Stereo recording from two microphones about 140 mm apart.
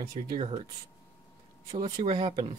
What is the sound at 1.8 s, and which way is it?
Speech, 35° right (ahead or behind).